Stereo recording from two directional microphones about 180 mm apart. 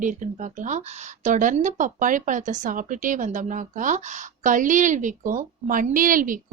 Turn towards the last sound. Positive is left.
turn(degrees=-50)  # may be behind; listen again after turning